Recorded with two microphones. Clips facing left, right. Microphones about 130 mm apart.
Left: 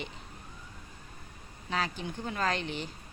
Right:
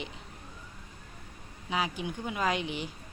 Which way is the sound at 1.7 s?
10° right (ahead or behind).